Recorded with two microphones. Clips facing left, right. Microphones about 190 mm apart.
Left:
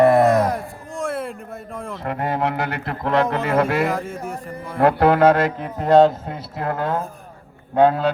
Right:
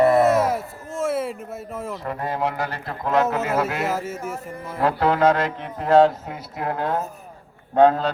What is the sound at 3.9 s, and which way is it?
Speech, 5° right (ahead or behind).